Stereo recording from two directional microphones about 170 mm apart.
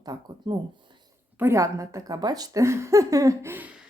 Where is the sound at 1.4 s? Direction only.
15° right (ahead or behind).